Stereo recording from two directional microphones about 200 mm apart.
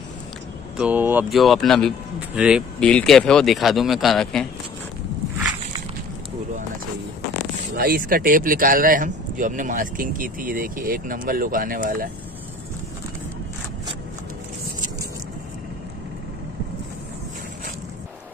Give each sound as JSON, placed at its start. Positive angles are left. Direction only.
{"t": 0.7, "sound": "speech", "side_deg": -10}
{"t": 7.7, "sound": "speech", "side_deg": -50}